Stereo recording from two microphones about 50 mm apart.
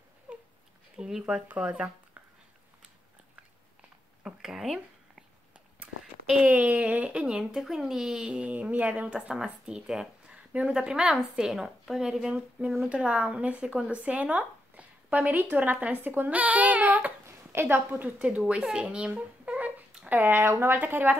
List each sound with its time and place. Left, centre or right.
0.3 s a sound: right
0.9 s speech: centre
4.4 s speech: centre
6.4 s speech: right
7.5 s speech: centre
10.3 s a sound: right
10.7 s speech: centre
12.8 s speech: right
17.4 s a sound: right
17.7 s a woman's voice: right
18.5 s speech: centre
20.1 s speech: right